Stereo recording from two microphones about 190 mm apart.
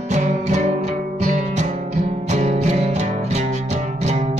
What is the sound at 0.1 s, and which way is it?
Music, 40° right (ahead or behind).